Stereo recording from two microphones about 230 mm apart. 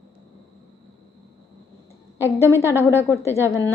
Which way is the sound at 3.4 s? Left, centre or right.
Centre.